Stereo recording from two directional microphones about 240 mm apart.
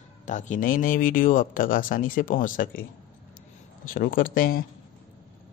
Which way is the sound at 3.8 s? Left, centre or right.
Left.